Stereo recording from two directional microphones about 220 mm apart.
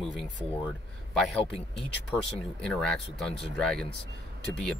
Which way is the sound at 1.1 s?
Centre (ahead or behind).